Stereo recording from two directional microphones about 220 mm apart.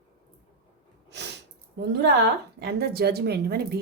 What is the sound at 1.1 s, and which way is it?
Speech, 50° right (ahead or behind).